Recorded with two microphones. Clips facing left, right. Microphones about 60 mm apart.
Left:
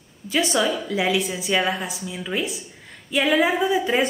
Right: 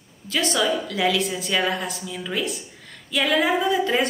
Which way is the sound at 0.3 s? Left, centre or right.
Centre.